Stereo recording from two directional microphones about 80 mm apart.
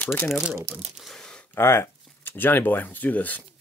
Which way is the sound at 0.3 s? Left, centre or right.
Centre.